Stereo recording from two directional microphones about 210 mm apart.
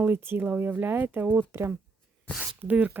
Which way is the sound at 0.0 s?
10° right (ahead or behind).